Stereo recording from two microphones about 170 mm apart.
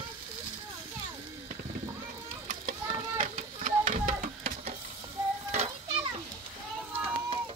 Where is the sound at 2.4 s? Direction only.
45° right (ahead or behind).